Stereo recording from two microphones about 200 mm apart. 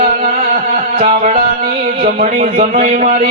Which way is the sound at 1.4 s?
45° right (ahead or behind).